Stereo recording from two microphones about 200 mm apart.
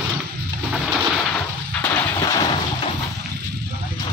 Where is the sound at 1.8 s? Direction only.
10° left (ahead or behind).